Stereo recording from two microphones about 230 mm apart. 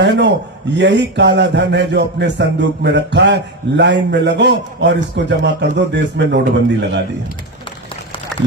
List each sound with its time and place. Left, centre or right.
0.0 s speech: right